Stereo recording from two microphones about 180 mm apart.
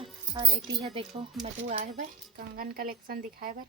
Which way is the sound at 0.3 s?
30° right (ahead or behind).